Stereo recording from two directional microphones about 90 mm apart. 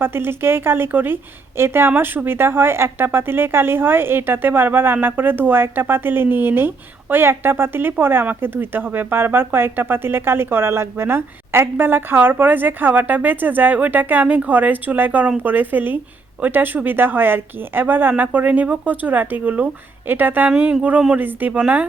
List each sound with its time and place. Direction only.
0.0 s speech: 25° right (ahead or behind)
20.5 s speech: 10° right (ahead or behind)